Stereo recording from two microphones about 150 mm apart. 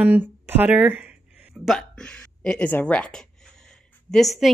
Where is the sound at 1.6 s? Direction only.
5° left (ahead or behind).